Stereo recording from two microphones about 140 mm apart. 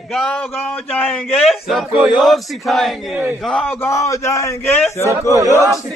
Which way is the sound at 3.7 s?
20° left (ahead or behind).